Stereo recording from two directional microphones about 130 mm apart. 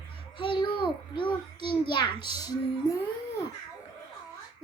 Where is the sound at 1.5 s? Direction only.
40° left (ahead or behind).